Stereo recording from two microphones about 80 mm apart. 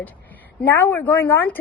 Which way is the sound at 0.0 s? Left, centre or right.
Left.